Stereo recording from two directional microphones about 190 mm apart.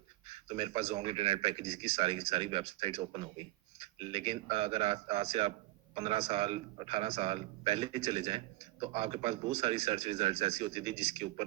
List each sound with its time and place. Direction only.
0.4 s a man's voice: 30° right (ahead or behind)